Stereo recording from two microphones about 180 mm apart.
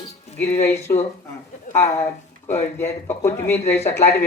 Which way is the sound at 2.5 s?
15° left (ahead or behind).